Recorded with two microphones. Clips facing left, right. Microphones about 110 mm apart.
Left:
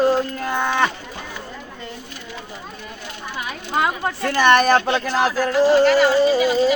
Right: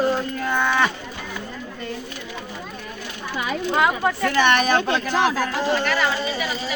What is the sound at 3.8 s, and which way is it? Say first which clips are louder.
Speech: even; 35° left (ahead or behind).